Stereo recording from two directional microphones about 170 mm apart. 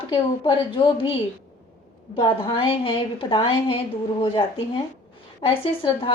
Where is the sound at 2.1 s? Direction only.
30° left (ahead or behind).